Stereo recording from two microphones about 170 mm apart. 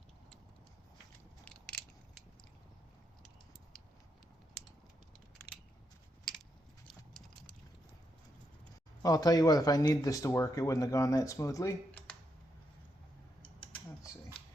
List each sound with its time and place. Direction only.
1.5 s crushing: 5° left (ahead or behind)
6.8 s a sound: 5° left (ahead or behind)
9.0 s speech: 20° left (ahead or behind)